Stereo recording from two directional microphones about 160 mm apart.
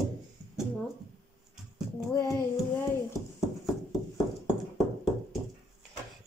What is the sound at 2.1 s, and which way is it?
Speech, 20° left (ahead or behind).